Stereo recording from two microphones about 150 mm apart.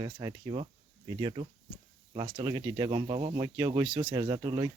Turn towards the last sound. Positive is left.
turn(degrees=-25)  # may be behind; listen again after turning